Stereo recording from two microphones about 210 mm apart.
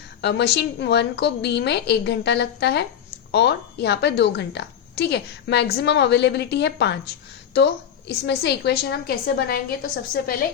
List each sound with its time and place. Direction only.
0.2 s a woman's voice: 55° left (ahead or behind)